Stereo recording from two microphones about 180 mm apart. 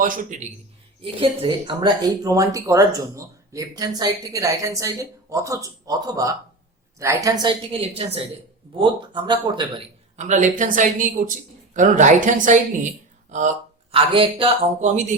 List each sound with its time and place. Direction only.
0.0 s a woman's voice: 50° right (ahead or behind)
1.0 s speech: 30° right (ahead or behind)
10.2 s a woman's voice: 40° right (ahead or behind)
13.9 s speech: 30° right (ahead or behind)